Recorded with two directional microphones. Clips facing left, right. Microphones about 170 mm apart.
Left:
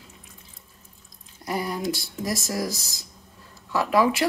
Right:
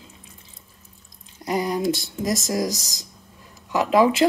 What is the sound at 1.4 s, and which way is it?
Speech, 20° right (ahead or behind).